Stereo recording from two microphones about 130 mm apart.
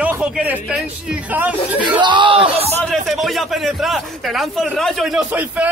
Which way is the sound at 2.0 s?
35° right (ahead or behind).